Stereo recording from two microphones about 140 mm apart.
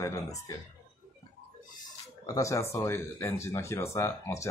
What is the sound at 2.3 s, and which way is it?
Speech, 20° left (ahead or behind).